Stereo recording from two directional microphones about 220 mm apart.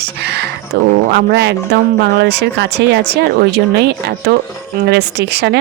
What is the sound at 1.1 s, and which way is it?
Speech, 50° right (ahead or behind).